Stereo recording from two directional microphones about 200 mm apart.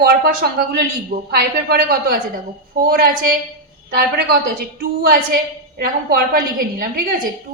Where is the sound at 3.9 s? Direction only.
50° right (ahead or behind).